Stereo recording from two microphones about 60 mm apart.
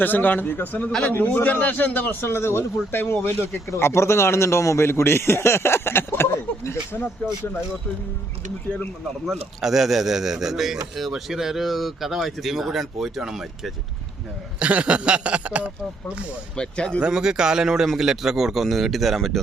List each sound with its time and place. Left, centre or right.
0.0 s a man's voice: left
7.2 s speech: left
9.2 s speech: centre
14.6 s a sound: right
16.6 s speech: centre
17.1 s speech: centre